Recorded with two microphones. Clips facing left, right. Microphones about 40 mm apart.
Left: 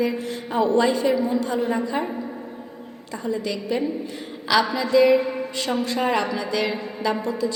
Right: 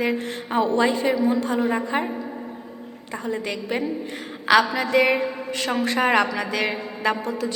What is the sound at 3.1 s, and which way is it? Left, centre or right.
A woman's voice, right.